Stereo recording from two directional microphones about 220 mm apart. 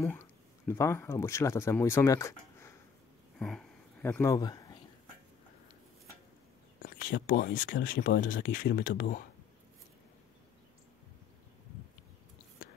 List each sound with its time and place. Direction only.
0.0 s speech: 10° left (ahead or behind)
3.3 s a sound: centre (ahead or behind); by 4.8 s 15° left (ahead or behind)
6.8 s speech: 40° left (ahead or behind)